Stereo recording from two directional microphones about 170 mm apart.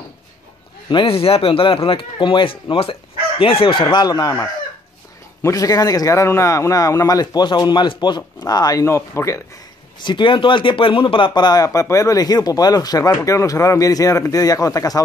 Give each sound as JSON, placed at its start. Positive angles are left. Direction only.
{"t": 0.8, "sound": "a man's voice", "side_deg": 30}
{"t": 9.9, "sound": "speech", "side_deg": 25}